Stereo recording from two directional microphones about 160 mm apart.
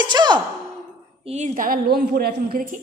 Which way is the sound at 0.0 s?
30° right (ahead or behind).